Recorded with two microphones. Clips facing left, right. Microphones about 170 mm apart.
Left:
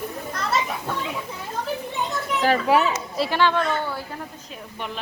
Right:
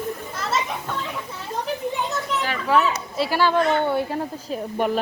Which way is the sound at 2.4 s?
40° left (ahead or behind).